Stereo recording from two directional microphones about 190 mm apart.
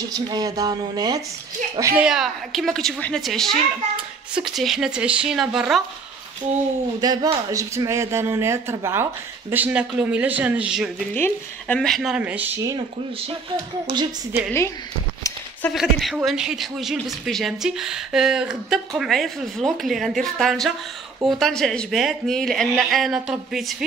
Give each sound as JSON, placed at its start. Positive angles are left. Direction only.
{"t": 0.0, "sound": "speech", "side_deg": -20}
{"t": 2.0, "sound": "a man's voice", "side_deg": 0}
{"t": 7.0, "sound": "speech", "side_deg": -20}
{"t": 11.1, "sound": "a man's voice", "side_deg": 10}
{"t": 15.7, "sound": "a man's voice", "side_deg": 0}